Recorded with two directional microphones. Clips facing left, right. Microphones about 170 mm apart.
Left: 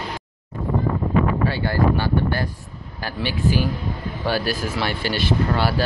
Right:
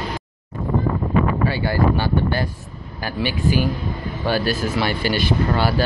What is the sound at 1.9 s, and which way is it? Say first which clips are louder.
Speech: right 1 dB; 20° right (ahead or behind).